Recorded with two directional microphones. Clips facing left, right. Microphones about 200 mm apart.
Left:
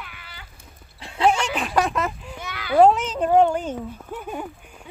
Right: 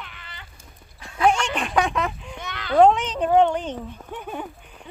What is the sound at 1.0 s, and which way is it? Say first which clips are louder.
Dog: even; 30° left (ahead or behind).